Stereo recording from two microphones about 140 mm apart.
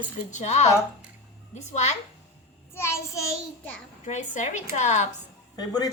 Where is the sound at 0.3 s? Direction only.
55° left (ahead or behind).